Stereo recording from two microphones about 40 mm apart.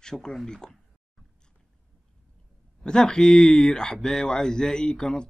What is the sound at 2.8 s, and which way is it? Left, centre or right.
Speech, centre.